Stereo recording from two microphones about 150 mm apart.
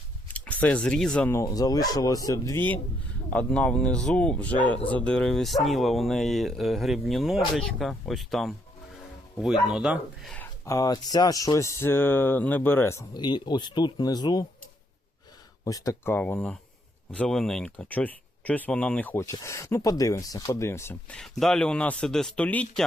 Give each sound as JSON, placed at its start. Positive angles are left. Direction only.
{"t": 0.3, "sound": "speech", "side_deg": 10}
{"t": 1.3, "sound": "speech", "side_deg": 20}
{"t": 10.3, "sound": "speech", "side_deg": 15}
{"t": 15.6, "sound": "speech", "side_deg": 20}
{"t": 19.3, "sound": "speech", "side_deg": 20}